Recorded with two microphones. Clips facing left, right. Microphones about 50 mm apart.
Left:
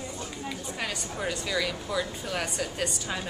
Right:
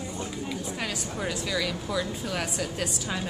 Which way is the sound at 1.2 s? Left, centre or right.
Centre.